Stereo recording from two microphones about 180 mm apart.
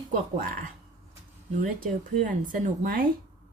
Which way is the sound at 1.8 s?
45° right (ahead or behind).